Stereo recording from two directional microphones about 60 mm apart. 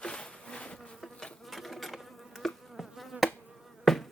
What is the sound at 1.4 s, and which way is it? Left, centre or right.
Insect, centre.